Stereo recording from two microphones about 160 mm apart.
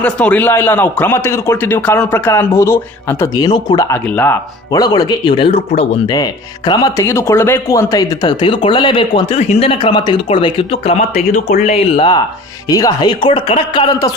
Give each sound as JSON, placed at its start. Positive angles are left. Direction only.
{"t": 0.0, "sound": "speech", "side_deg": 10}
{"t": 6.7, "sound": "speech", "side_deg": 25}
{"t": 11.9, "sound": "speech", "side_deg": 30}